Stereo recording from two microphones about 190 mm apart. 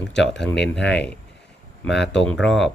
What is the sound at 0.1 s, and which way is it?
Speech, 70° left (ahead or behind).